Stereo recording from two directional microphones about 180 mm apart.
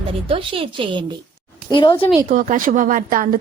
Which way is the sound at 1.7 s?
25° left (ahead or behind).